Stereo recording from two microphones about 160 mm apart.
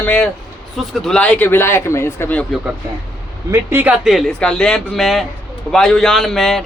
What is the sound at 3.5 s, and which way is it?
A man's voice, 15° right (ahead or behind).